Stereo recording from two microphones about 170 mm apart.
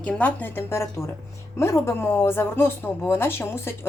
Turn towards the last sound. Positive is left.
turn(degrees=15)  # may be behind; listen again after turning